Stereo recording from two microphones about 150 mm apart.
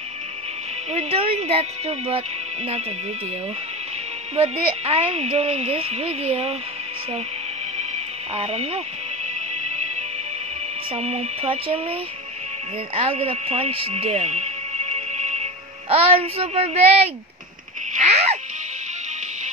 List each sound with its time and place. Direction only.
0.9 s speech: 40° right (ahead or behind)
4.4 s speech: 40° right (ahead or behind)
7.7 s music: 45° right (ahead or behind)
10.9 s speech: 45° right (ahead or behind)
17.9 s a sound: 45° right (ahead or behind)